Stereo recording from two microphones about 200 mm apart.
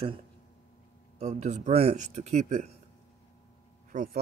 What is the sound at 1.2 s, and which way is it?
A man's voice, 35° right (ahead or behind).